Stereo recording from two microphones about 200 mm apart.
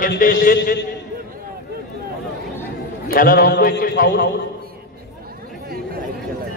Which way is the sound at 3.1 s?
45° left (ahead or behind).